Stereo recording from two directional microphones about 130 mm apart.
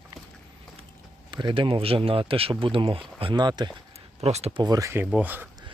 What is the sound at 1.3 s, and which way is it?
Speech, 40° right (ahead or behind).